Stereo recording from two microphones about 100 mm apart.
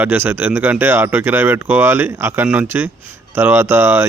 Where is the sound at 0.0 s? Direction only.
20° right (ahead or behind).